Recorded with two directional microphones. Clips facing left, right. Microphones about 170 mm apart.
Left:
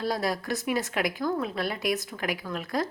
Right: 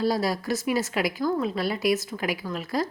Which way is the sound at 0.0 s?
Centre (ahead or behind).